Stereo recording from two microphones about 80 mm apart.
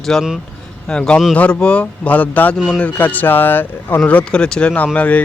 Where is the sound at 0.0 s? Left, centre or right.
Centre.